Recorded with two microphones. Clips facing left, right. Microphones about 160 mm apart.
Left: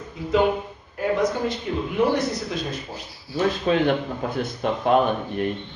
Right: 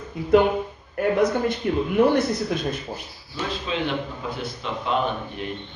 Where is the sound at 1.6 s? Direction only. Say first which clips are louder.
Right 4 dB; 60° right (ahead or behind).